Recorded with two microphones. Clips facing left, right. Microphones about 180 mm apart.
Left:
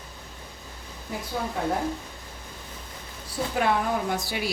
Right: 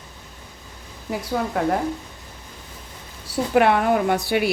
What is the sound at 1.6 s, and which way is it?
Speech, 75° right (ahead or behind).